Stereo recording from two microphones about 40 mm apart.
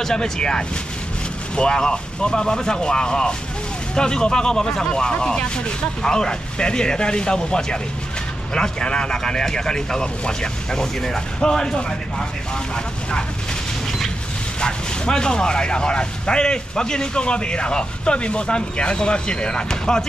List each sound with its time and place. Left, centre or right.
0.0 s speech: centre
14.6 s speech: centre